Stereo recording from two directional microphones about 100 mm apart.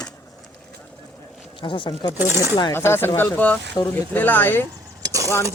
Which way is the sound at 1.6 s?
55° left (ahead or behind).